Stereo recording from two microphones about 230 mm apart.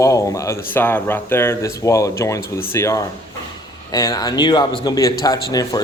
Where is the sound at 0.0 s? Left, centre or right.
Centre.